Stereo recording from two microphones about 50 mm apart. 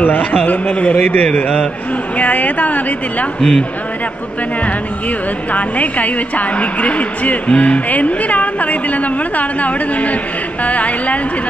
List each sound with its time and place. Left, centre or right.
0.0 s a woman's voice: left
3.3 s speech: centre
5.5 s a woman's voice: left